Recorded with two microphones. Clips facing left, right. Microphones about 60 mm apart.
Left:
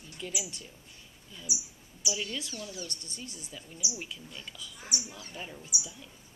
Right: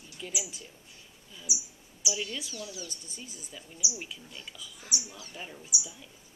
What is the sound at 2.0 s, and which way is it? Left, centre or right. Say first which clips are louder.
A woman's voice: even; centre.